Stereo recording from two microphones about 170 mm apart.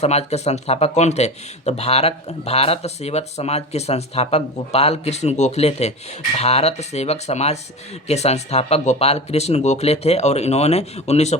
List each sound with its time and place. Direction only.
0.0 s speech: 40° left (ahead or behind)